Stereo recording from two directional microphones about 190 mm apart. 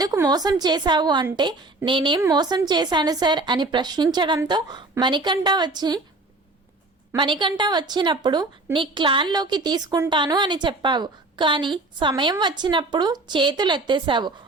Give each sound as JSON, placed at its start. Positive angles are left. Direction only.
{"t": 0.0, "sound": "a woman's voice", "side_deg": -20}
{"t": 7.2, "sound": "a woman's voice", "side_deg": -25}